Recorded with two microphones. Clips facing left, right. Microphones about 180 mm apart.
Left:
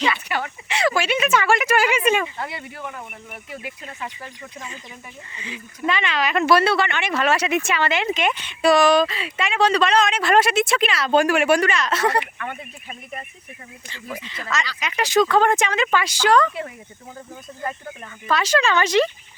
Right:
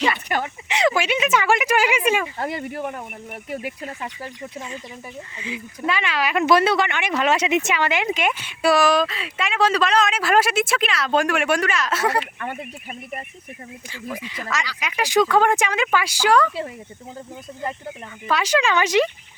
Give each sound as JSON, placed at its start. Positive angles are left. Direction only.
{"t": 0.0, "sound": "speech", "side_deg": -45}
{"t": 0.7, "sound": "speech", "side_deg": -20}
{"t": 2.4, "sound": "speech", "side_deg": -45}
{"t": 5.4, "sound": "speech", "side_deg": -5}
{"t": 13.9, "sound": "speech", "side_deg": -10}
{"t": 18.3, "sound": "speech", "side_deg": -15}